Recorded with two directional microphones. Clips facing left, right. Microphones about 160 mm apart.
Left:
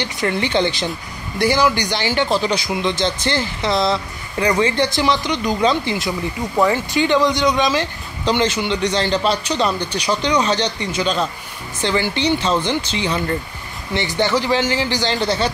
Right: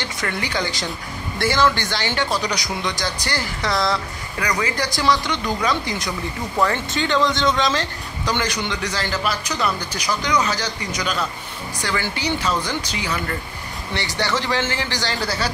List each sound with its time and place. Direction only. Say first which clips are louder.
0.0 s speech: left 6 dB; 25° left (ahead or behind)
7.0 s speech: left 4 dB; 15° left (ahead or behind)